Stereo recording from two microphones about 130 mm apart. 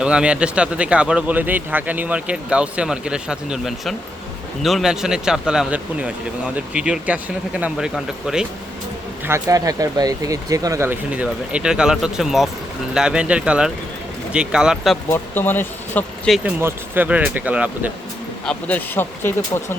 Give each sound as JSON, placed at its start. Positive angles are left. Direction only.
{"t": 0.0, "sound": "speech", "side_deg": -10}
{"t": 9.2, "sound": "speech", "side_deg": -25}
{"t": 10.8, "sound": "speech", "side_deg": -10}
{"t": 15.1, "sound": "speech", "side_deg": 15}
{"t": 16.4, "sound": "speech", "side_deg": -15}
{"t": 18.4, "sound": "speech", "side_deg": 15}